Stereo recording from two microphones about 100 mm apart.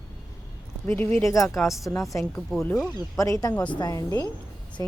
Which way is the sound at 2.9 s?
35° left (ahead or behind).